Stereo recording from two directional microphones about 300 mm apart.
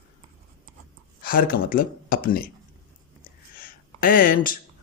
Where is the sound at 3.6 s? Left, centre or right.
Left.